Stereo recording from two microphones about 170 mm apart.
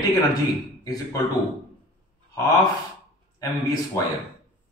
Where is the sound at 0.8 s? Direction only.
20° left (ahead or behind).